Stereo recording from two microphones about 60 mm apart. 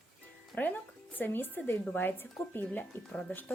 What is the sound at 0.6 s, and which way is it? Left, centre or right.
Speech, left.